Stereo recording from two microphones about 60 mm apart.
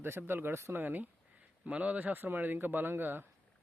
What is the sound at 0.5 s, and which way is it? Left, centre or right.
Speech, right.